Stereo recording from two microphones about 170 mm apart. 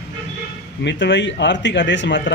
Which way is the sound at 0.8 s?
90° left.